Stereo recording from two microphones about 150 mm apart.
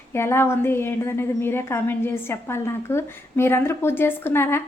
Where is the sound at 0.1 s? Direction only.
15° left (ahead or behind).